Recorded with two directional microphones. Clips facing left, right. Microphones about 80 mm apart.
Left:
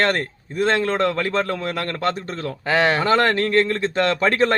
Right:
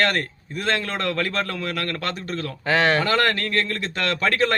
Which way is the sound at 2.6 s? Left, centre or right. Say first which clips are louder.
Left 1 dB; centre.